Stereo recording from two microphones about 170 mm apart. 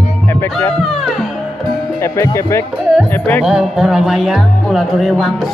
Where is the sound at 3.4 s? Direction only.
5° right (ahead or behind).